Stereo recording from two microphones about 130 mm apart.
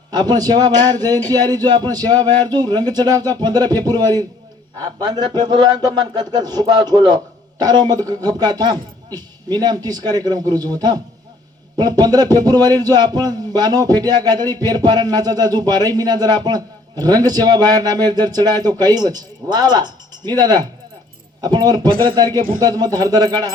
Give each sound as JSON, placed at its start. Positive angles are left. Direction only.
{"t": 0.1, "sound": "a man's voice", "side_deg": -30}